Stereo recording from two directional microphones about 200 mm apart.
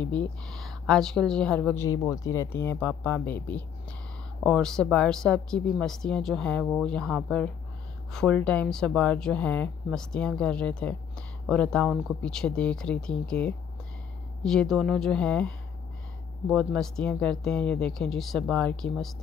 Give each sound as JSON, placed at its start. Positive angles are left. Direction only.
{"t": 0.0, "sound": "a woman's voice", "side_deg": 5}